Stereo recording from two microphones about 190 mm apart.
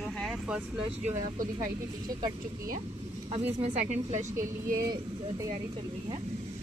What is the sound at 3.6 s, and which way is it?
Speech, 40° right (ahead or behind).